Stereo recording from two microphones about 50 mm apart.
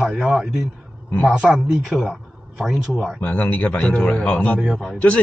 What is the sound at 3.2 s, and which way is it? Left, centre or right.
Speech, left.